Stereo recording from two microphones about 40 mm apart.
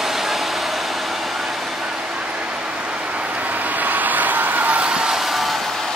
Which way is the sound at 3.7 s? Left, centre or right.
Right.